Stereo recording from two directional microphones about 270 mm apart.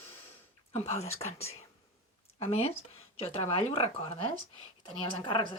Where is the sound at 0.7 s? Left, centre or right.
Left.